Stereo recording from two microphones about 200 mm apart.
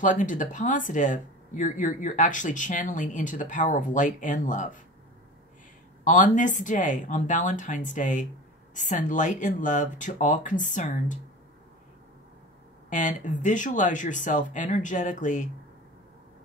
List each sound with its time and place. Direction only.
0.0 s speech: 40° left (ahead or behind)
6.0 s speech: 40° left (ahead or behind)
12.9 s speech: 40° left (ahead or behind)